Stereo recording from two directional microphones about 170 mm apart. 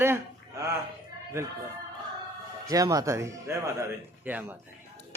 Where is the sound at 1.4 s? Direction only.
15° right (ahead or behind).